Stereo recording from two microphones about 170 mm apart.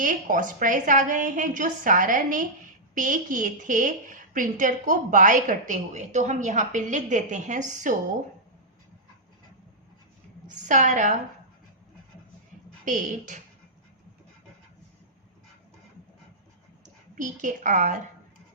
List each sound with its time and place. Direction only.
0.0 s a woman's voice: 50° right (ahead or behind)
10.7 s a woman's voice: 45° right (ahead or behind)
12.8 s a woman's voice: 50° right (ahead or behind)
16.8 s a woman's voice: 50° right (ahead or behind)